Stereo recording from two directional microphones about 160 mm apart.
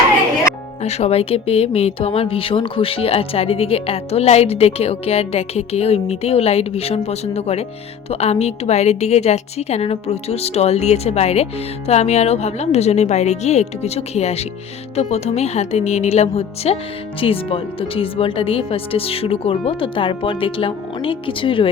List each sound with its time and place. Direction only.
0.8 s a woman's voice: 40° left (ahead or behind)